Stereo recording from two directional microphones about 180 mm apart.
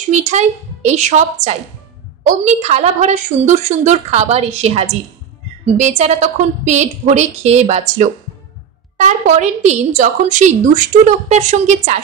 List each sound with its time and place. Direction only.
0.1 s a woman's voice: 40° right (ahead or behind)